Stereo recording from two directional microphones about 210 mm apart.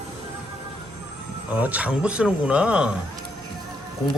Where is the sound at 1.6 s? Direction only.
5° right (ahead or behind).